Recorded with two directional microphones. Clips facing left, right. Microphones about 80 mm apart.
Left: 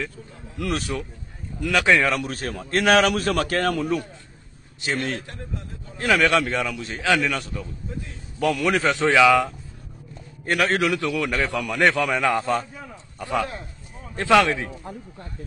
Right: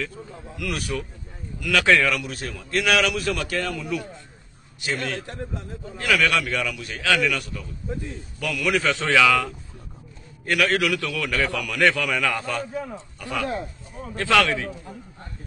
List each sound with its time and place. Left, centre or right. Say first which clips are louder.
0.6 s a man's voice: left 2 dB; left
2.2 s a man's voice: left 3 dB; left
4.8 s a man's voice: left 1 dB; left